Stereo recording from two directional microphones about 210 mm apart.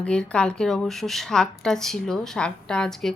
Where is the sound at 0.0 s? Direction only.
5° left (ahead or behind).